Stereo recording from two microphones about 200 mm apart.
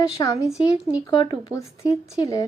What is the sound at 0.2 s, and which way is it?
A woman's voice, 15° left (ahead or behind).